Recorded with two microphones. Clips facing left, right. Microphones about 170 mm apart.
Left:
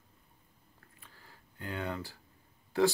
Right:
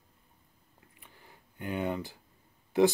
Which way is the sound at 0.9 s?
20° right (ahead or behind).